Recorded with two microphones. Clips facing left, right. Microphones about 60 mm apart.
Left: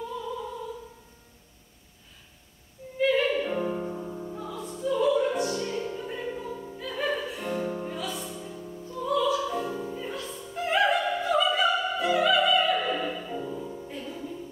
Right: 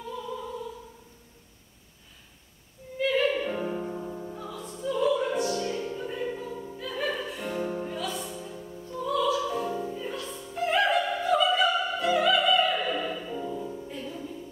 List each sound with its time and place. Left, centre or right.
3.0 s music: centre
9.0 s opera: centre